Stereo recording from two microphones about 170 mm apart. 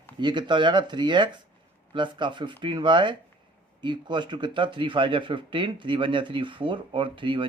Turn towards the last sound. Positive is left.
turn(degrees=-30)  # may be behind; listen again after turning